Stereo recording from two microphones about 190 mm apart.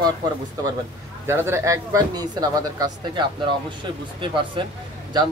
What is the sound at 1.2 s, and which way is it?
A man's voice, 15° right (ahead or behind).